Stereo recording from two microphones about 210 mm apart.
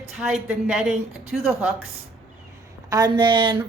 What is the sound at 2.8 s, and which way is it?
Speech, 20° right (ahead or behind).